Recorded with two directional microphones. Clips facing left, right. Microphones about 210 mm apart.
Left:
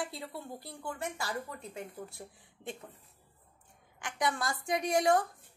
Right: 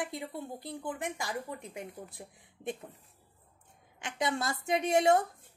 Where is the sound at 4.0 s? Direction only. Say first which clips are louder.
Right 1 dB; 25° right (ahead or behind).